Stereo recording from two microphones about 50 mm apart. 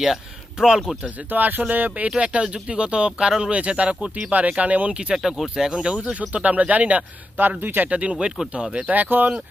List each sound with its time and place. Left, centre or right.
0.0 s speech: centre
1.0 s speech: right
2.0 s speech: right
5.1 s speech: centre; by 7.1 s right
7.3 s speech: right